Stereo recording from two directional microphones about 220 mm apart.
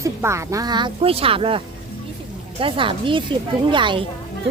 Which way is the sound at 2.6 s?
25° right (ahead or behind).